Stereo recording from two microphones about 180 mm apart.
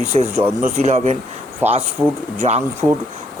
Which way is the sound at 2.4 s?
35° right (ahead or behind).